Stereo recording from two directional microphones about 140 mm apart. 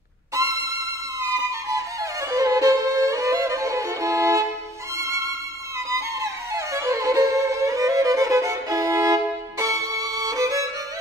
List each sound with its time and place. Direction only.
0.3 s music: 25° right (ahead or behind)